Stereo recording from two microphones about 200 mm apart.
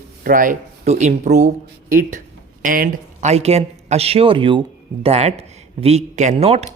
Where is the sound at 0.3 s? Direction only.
40° right (ahead or behind).